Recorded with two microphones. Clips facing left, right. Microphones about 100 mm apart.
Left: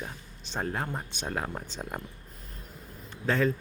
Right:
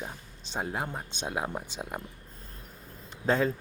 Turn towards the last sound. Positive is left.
turn(degrees=-20)  # may be behind; listen again after turning